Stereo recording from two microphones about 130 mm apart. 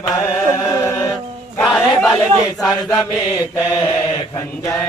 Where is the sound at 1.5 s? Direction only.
Centre (ahead or behind).